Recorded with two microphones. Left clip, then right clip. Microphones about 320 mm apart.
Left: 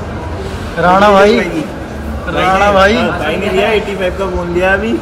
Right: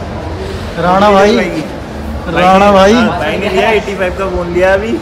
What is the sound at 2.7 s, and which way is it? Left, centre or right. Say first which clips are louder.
Speech: right 2 dB; centre.